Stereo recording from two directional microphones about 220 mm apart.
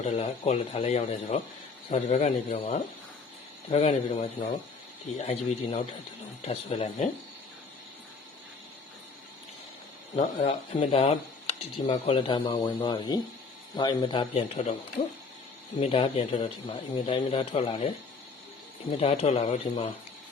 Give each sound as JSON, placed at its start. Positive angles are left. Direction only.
{"t": 0.0, "sound": "speech", "side_deg": 30}
{"t": 10.2, "sound": "speech", "side_deg": 35}